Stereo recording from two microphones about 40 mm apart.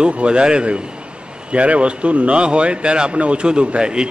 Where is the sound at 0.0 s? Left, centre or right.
Right.